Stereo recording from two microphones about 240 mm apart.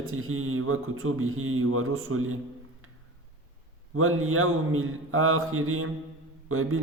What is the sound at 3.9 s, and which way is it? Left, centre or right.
Mantra, right.